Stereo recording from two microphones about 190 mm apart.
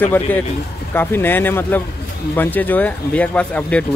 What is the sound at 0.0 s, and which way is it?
Speech, 10° left (ahead or behind).